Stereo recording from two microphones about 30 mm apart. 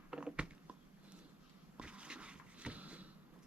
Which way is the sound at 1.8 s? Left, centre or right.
Right.